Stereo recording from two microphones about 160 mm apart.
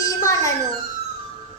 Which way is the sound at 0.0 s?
20° left (ahead or behind).